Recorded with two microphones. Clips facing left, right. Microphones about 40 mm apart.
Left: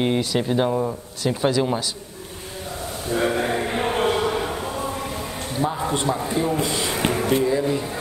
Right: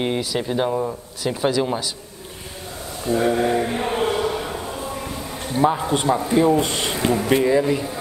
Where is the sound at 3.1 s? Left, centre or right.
Left.